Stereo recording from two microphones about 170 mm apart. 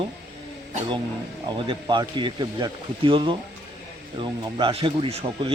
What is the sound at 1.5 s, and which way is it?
A man's voice, 30° right (ahead or behind).